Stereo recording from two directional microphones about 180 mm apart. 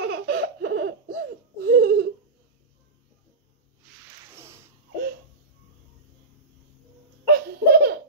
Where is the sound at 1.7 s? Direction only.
60° right (ahead or behind).